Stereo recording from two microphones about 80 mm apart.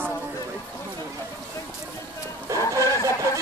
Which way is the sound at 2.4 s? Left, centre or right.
Right.